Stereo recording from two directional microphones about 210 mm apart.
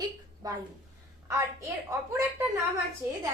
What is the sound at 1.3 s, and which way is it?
Speech, 15° right (ahead or behind).